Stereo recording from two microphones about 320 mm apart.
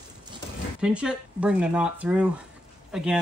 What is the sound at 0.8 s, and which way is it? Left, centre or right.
Speech, centre.